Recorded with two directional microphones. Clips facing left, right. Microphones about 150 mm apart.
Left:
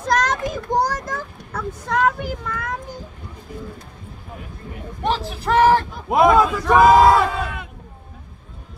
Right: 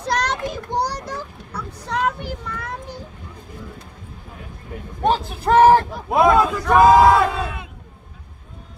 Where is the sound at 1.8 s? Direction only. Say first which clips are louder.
Left 3 dB; 50° left (ahead or behind).